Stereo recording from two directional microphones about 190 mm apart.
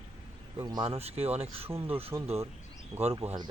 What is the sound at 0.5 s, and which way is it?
Speech, 20° right (ahead or behind).